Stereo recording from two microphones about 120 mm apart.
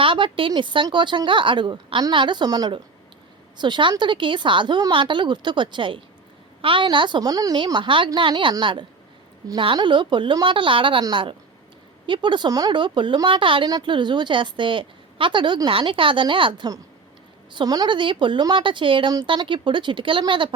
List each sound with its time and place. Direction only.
0.0 s a woman's voice: 45° right (ahead or behind)